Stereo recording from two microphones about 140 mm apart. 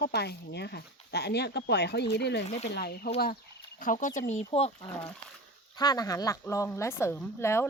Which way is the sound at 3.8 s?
70° left (ahead or behind).